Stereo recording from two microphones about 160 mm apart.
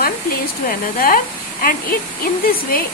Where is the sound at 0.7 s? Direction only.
60° left (ahead or behind).